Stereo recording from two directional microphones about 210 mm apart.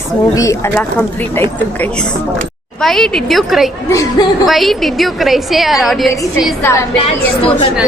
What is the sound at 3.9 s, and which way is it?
Speech, 15° left (ahead or behind).